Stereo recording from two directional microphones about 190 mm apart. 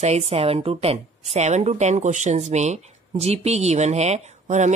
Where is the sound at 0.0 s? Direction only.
35° right (ahead or behind).